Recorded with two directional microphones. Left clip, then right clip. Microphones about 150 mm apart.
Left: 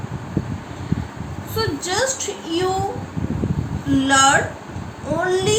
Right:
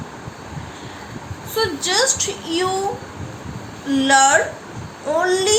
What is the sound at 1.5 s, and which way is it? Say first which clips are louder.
A woman's voice: right 3 dB; 60° right (ahead or behind).